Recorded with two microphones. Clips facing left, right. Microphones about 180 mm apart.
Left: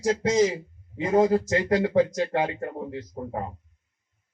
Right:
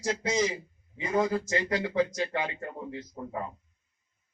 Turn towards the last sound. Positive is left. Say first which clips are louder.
# left 4 dB
turn(degrees=45)  # may be behind; listen again after turning